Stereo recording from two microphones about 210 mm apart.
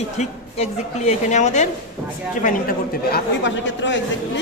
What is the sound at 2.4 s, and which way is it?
Speech, 45° left (ahead or behind).